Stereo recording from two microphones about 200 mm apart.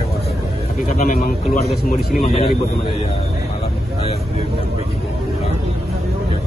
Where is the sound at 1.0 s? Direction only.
45° left (ahead or behind).